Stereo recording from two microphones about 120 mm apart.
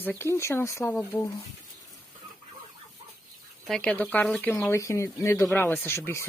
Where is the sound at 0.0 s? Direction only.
20° left (ahead or behind).